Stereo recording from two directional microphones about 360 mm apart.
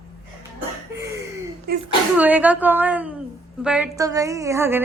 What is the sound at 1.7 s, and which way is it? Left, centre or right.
Speech, right.